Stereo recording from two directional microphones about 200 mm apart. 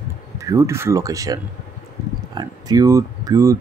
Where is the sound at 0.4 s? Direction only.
15° right (ahead or behind).